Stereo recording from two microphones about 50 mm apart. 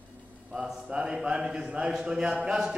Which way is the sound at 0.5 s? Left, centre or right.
Centre.